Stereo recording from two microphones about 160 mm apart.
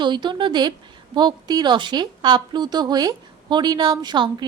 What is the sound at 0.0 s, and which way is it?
A woman's voice, 30° right (ahead or behind).